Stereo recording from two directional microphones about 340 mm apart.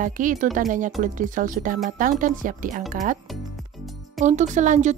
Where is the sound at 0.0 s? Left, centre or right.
Right.